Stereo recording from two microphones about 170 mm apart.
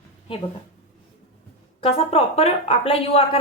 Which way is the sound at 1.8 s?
35° left (ahead or behind).